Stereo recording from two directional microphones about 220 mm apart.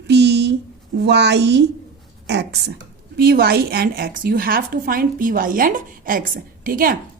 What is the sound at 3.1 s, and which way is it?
Speech, 45° right (ahead or behind).